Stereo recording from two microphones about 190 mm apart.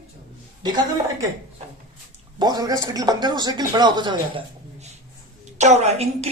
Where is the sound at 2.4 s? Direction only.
20° right (ahead or behind).